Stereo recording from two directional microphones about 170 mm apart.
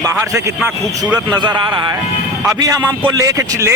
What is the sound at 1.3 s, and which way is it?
Speech, 25° right (ahead or behind).